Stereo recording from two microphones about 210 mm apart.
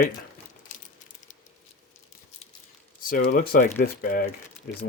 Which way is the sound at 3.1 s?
40° left (ahead or behind).